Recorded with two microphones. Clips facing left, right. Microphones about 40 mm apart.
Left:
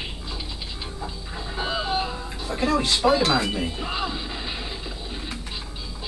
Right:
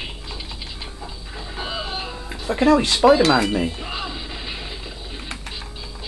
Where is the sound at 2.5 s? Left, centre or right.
Right.